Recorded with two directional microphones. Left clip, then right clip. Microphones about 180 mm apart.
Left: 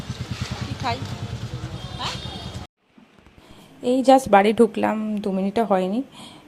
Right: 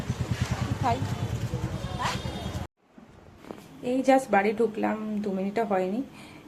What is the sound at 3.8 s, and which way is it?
Speech, 40° left (ahead or behind).